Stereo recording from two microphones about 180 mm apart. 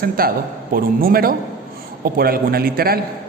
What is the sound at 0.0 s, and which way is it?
A man's voice, 55° right (ahead or behind).